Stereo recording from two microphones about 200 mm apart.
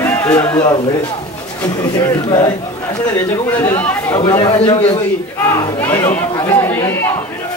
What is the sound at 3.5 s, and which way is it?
Speech, 10° left (ahead or behind).